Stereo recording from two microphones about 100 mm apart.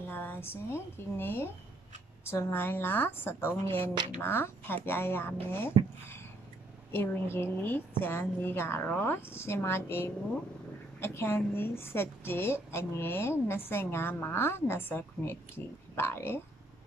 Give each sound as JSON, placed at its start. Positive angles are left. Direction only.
{"t": 0.0, "sound": "a woman's voice", "side_deg": 20}
{"t": 6.9, "sound": "a woman's voice", "side_deg": 25}